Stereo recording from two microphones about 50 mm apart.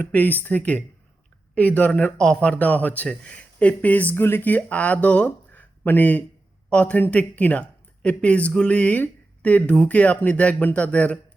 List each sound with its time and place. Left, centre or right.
0.0 s speech: left
2.1 s speech: centre
2.5 s speech: left
4.1 s speech: left
4.4 s speech: left
6.7 s a man's voice: left